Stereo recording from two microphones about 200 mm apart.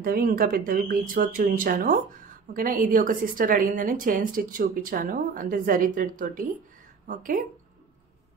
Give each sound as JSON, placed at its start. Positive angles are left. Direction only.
{"t": 0.0, "sound": "a woman's voice", "side_deg": -45}